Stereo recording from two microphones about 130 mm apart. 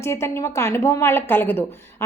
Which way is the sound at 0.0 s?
20° left (ahead or behind).